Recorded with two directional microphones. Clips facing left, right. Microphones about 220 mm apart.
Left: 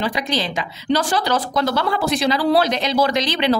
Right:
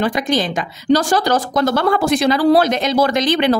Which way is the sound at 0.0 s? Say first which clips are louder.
Right 5 dB; 50° right (ahead or behind).